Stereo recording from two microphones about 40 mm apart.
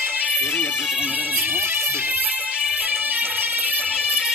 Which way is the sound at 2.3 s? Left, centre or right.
Right.